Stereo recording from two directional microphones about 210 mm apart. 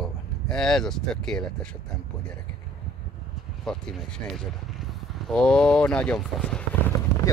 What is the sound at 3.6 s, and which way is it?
Speech, 5° left (ahead or behind).